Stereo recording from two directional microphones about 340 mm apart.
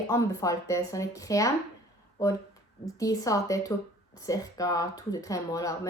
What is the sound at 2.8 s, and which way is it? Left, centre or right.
A woman's voice, centre.